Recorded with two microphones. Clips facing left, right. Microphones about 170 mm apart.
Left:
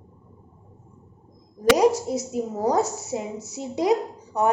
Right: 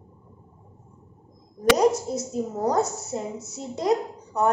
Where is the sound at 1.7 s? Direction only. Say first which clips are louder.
Left 2 dB; centre (ahead or behind).